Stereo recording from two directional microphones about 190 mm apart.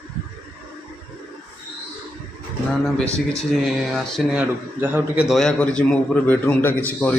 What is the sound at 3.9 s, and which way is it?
A man's voice, 10° right (ahead or behind).